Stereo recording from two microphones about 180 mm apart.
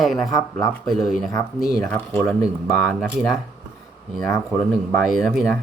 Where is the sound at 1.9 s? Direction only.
10° left (ahead or behind).